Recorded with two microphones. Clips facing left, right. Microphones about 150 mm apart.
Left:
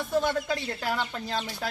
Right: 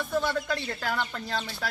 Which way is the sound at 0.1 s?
15° left (ahead or behind).